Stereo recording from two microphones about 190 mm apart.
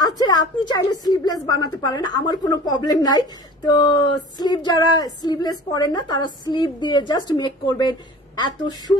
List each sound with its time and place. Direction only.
0.0 s a woman's voice: 20° left (ahead or behind)